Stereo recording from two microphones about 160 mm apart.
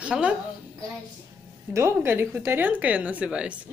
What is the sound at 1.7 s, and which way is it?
Speech, 15° right (ahead or behind).